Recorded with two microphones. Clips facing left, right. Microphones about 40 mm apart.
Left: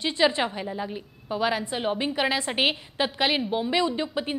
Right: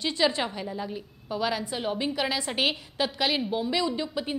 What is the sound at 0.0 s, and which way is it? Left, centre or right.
A woman's voice, left.